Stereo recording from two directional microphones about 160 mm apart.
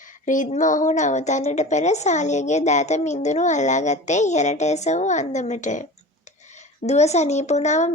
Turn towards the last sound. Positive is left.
turn(degrees=45)  # may be behind; listen again after turning